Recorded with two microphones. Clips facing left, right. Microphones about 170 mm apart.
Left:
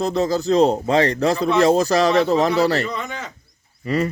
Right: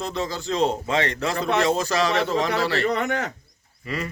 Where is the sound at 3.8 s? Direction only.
40° left (ahead or behind).